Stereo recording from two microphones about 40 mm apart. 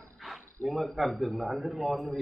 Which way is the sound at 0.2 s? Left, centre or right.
Centre.